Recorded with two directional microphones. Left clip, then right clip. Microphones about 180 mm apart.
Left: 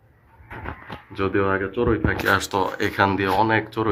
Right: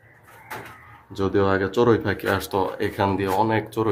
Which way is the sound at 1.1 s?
30° right (ahead or behind).